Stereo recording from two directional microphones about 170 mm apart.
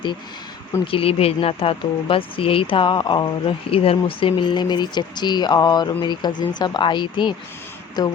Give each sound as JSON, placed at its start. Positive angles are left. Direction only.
{"t": 0.9, "sound": "speech", "side_deg": 35}